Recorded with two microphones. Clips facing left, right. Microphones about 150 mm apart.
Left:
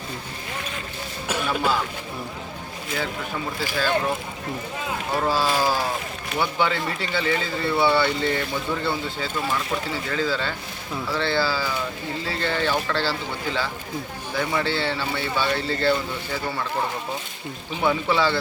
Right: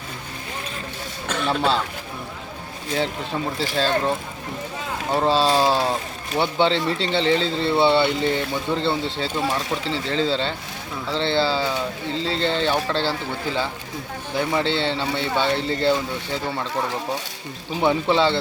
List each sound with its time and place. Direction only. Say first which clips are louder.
1.5 s speech: right 3 dB; 30° right (ahead or behind)
3.8 s speech: right 2 dB; 25° right (ahead or behind)
5.1 s speech: right 4 dB; 25° right (ahead or behind)
17.7 s speech: right 3 dB; 20° right (ahead or behind)